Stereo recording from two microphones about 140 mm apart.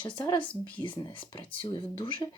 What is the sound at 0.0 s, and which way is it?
Speech, 35° left (ahead or behind).